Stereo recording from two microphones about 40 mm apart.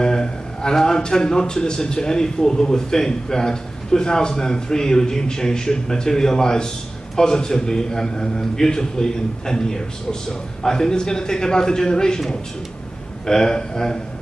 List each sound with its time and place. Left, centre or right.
0.0 s a man's voice: centre
13.2 s a man's voice: centre